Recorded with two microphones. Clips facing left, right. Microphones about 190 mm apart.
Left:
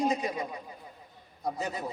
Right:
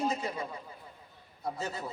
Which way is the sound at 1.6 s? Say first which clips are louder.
Left 2 dB; 15° left (ahead or behind).